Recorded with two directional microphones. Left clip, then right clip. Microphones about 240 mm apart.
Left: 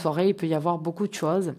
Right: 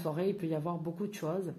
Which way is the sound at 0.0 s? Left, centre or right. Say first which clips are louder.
Left 10 dB; left.